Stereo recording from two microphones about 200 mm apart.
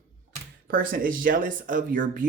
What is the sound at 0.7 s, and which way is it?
Speech, 45° right (ahead or behind).